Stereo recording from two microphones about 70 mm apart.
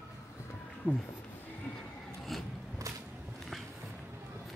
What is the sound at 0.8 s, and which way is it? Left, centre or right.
Speech, left.